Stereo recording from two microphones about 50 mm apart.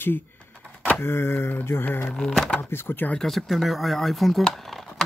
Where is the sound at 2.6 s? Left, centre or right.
Left.